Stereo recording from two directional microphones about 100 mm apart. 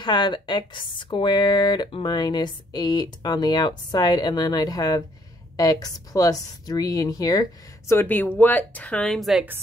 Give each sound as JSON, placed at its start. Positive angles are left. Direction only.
{"t": 0.0, "sound": "a woman's voice", "side_deg": 50}
{"t": 9.2, "sound": "a woman's voice", "side_deg": 0}